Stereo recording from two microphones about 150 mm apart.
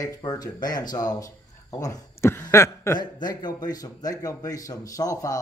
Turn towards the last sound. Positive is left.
turn(degrees=25)  # may be behind; listen again after turning